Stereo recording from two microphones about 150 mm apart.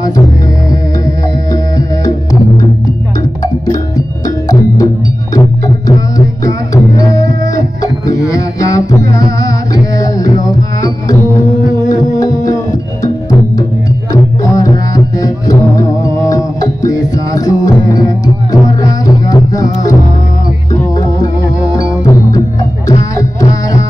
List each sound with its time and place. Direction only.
5.9 s music: 25° left (ahead or behind)
21.7 s music: 25° left (ahead or behind)